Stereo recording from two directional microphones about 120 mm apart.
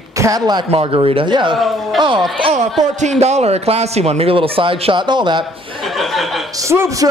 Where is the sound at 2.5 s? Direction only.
70° right (ahead or behind); by 5.4 s 40° right (ahead or behind).